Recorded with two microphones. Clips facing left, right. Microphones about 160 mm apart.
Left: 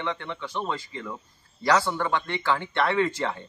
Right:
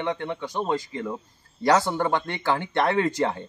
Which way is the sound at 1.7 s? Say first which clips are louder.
Right 2 dB; 25° right (ahead or behind).